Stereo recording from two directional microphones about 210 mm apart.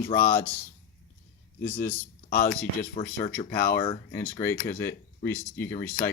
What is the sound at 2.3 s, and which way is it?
Speech, 45° left (ahead or behind).